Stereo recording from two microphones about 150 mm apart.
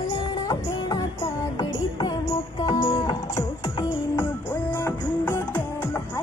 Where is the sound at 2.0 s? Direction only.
25° left (ahead or behind).